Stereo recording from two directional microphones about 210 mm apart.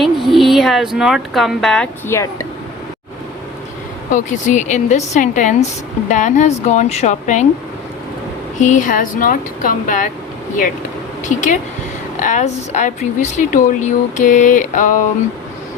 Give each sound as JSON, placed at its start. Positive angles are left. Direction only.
{"t": 0.0, "sound": "speech", "side_deg": 0}
{"t": 4.1, "sound": "a woman's voice", "side_deg": 35}
{"t": 8.5, "sound": "a woman's voice", "side_deg": 35}
{"t": 11.2, "sound": "a woman's voice", "side_deg": 35}